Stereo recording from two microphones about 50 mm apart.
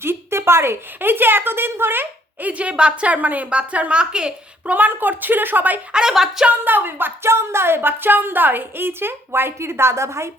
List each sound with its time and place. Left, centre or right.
0.0 s speech: right
1.1 s a woman's voice: right
2.5 s a woman's voice: right
4.7 s a woman's voice: right
5.9 s speech: centre
6.7 s a woman's voice: right
7.3 s a woman's voice: right